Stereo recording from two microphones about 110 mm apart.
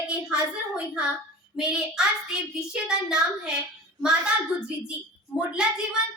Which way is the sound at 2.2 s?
5° right (ahead or behind).